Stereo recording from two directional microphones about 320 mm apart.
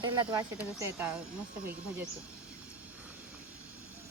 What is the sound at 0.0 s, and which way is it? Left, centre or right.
Speech, centre.